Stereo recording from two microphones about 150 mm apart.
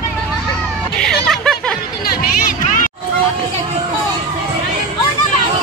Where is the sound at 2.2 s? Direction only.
70° left (ahead or behind).